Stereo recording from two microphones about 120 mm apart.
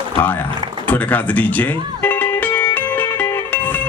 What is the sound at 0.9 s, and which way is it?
Music, 15° left (ahead or behind).